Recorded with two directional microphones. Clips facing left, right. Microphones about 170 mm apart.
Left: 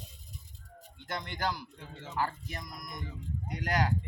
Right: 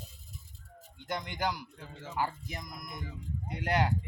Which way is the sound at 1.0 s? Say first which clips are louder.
Right 1 dB; 15° right (ahead or behind).